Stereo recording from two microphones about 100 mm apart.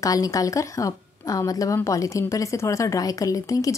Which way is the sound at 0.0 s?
35° left (ahead or behind).